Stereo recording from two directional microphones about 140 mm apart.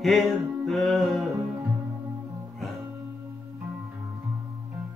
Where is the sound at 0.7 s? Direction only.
Centre (ahead or behind).